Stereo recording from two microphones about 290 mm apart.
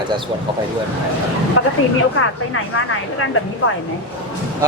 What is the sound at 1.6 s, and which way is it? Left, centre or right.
Speech, left.